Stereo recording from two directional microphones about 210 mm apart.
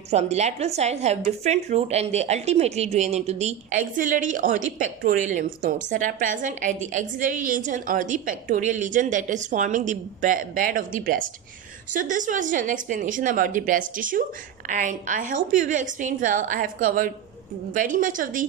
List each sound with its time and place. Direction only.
0.1 s a woman's voice: 30° right (ahead or behind)